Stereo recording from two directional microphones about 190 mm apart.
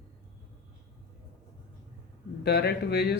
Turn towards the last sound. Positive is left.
turn(degrees=60)  # may be behind; listen again after turning